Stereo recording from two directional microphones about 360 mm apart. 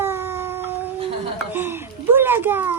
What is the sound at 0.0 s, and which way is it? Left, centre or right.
Cat, centre.